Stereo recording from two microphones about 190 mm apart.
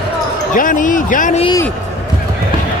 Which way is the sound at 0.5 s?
45° left (ahead or behind).